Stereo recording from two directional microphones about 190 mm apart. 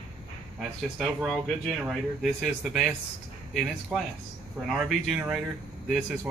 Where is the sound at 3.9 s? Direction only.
5° right (ahead or behind).